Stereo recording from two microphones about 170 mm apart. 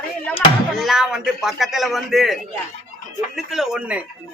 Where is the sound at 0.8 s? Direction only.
Centre (ahead or behind).